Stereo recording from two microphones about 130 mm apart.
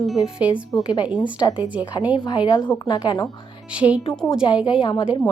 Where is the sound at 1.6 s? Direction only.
10° right (ahead or behind).